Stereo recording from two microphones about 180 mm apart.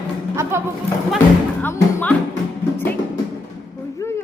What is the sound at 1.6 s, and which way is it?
Speech, 10° left (ahead or behind).